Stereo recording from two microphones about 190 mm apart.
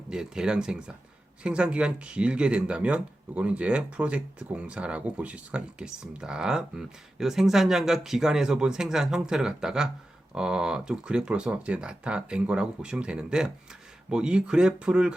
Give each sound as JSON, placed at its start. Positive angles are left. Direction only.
{"t": 0.1, "sound": "speech", "side_deg": -5}